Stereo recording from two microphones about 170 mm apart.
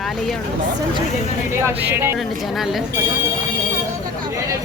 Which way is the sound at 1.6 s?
15° right (ahead or behind).